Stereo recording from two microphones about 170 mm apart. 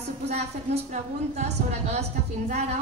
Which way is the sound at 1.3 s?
40° right (ahead or behind).